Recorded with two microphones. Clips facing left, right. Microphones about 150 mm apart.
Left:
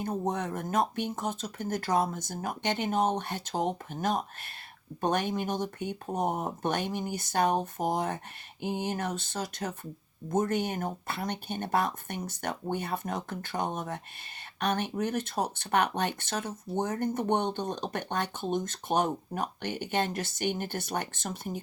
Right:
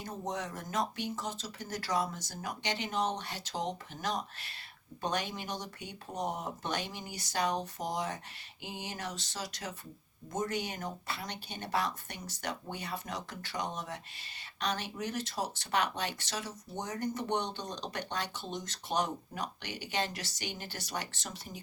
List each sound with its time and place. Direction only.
0.0 s speech: 55° left (ahead or behind)